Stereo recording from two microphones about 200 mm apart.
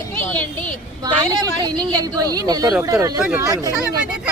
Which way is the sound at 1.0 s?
20° right (ahead or behind).